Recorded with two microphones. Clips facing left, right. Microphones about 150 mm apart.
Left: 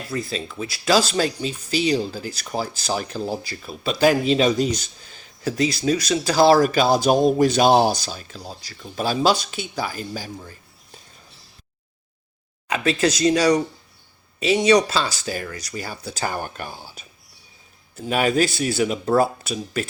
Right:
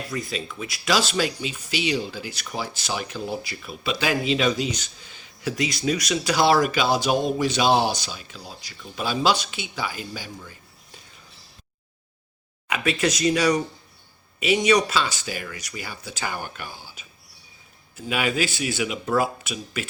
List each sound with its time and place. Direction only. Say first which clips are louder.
0.1 s speech: left 7 dB; 30° left (ahead or behind)
12.6 s speech: left 3 dB; 30° left (ahead or behind)